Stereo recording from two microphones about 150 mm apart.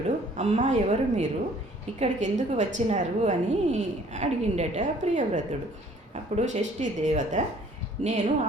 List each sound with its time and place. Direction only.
0.3 s a woman's voice: 50° right (ahead or behind)